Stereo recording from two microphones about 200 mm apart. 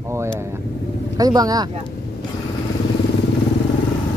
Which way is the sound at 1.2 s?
20° right (ahead or behind).